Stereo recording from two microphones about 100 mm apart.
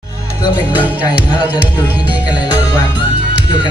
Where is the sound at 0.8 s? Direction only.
15° right (ahead or behind).